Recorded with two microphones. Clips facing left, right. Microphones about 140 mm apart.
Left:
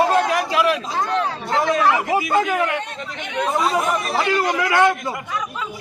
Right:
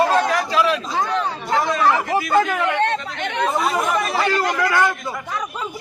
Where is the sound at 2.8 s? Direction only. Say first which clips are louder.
Right 9 dB; 90° right.